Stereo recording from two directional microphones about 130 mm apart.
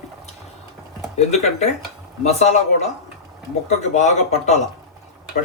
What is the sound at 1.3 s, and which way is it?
Speech, 60° left (ahead or behind).